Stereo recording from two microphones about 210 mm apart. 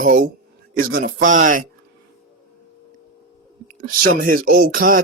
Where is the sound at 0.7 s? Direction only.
45° right (ahead or behind).